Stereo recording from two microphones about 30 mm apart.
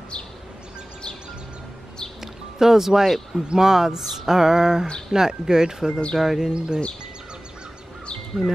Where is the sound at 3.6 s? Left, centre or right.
Centre.